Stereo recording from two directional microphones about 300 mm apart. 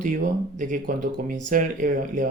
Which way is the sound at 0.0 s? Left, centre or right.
Right.